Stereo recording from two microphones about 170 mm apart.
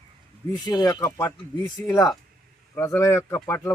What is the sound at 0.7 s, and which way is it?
Speech, 20° left (ahead or behind).